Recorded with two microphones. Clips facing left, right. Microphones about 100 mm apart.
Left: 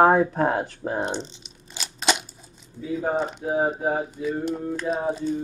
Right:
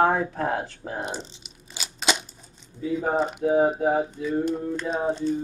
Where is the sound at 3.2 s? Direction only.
5° right (ahead or behind).